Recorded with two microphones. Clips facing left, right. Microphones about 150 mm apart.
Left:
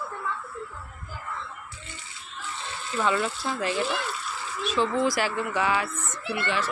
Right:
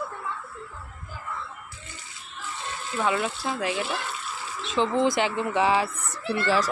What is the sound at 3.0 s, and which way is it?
Speech, 10° right (ahead or behind).